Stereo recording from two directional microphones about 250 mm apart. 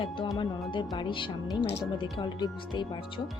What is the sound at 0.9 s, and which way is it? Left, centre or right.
Speech, centre.